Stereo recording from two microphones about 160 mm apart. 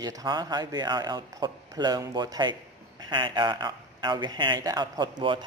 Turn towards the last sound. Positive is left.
turn(degrees=-25)  # may be behind; listen again after turning